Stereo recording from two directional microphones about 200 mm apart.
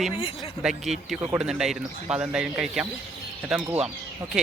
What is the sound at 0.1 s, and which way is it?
Speech, 30° left (ahead or behind).